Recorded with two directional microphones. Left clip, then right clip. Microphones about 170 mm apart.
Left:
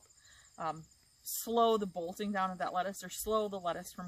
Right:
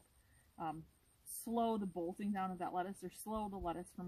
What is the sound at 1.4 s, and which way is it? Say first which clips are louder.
Speech: left 9 dB; 25° left (ahead or behind).